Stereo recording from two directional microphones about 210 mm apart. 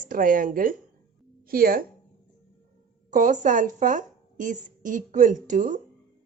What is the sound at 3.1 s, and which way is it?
A woman's voice, 35° right (ahead or behind).